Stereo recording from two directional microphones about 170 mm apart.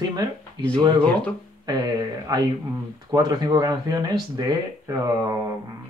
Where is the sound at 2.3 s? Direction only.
20° right (ahead or behind).